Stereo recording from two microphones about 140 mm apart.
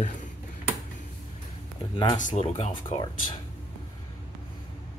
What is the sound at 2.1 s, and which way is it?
Speech, 65° left (ahead or behind).